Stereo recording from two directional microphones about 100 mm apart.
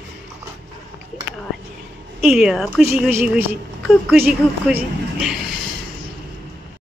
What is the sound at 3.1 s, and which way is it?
Speech, 20° right (ahead or behind).